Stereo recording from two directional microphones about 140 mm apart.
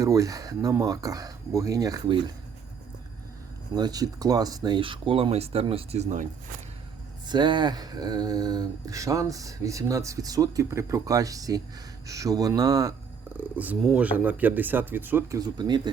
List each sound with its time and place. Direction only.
0.0 s speech: 25° right (ahead or behind)
3.8 s speech: 30° right (ahead or behind); by 6.2 s 55° right (ahead or behind)
7.3 s speech: 30° right (ahead or behind)
13.3 s speech: 10° right (ahead or behind)
15.4 s speech: 30° right (ahead or behind)